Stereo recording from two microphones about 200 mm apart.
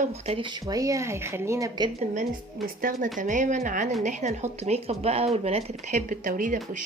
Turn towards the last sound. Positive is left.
turn(degrees=-40)  # may be behind; listen again after turning